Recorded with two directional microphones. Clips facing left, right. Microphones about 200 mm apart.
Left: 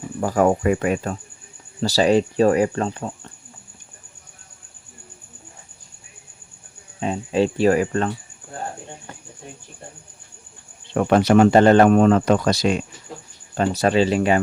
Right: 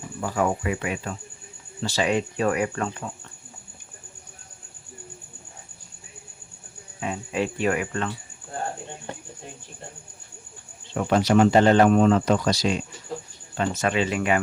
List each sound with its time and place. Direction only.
0.2 s speech: 45° left (ahead or behind)
7.0 s speech: 30° left (ahead or behind)
10.9 s speech: 60° left (ahead or behind)
13.6 s speech: 35° left (ahead or behind)